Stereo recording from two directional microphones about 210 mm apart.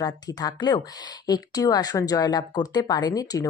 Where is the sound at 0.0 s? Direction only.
20° left (ahead or behind).